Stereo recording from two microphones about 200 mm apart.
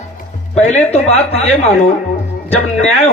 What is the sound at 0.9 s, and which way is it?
Speech, 30° left (ahead or behind).